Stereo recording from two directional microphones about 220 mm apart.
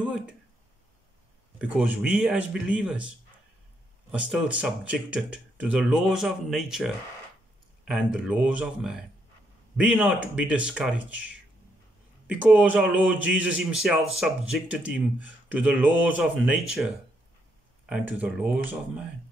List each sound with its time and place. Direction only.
1.6 s speech: 5° right (ahead or behind)
4.1 s speech: 5° right (ahead or behind)
17.8 s speech: 5° right (ahead or behind)